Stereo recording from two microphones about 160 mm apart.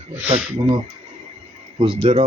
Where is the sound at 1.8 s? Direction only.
30° right (ahead or behind).